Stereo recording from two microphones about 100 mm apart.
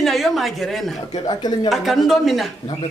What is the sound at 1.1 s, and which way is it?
Speech, 40° left (ahead or behind).